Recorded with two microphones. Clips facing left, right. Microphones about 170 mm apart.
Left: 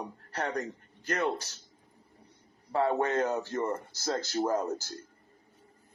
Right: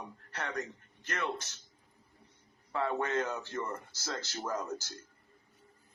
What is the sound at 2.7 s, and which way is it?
Speech, 35° left (ahead or behind).